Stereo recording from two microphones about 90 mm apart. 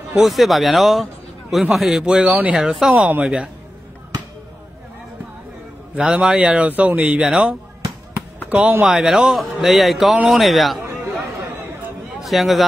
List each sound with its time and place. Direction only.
0.1 s a man's voice: centre (ahead or behind)
2.6 s a man's voice: 5° right (ahead or behind)
3.1 s a woman's voice: 20° right (ahead or behind)
5.9 s speech: 10° right (ahead or behind)
8.1 s a sound: 15° right (ahead or behind)
8.9 s a man's voice: 5° right (ahead or behind)
12.2 s a man's voice: centre (ahead or behind)